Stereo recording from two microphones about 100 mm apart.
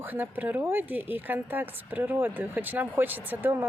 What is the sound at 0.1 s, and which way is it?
Speech, 20° right (ahead or behind).